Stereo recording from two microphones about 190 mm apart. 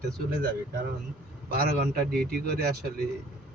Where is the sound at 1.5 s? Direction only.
55° right (ahead or behind).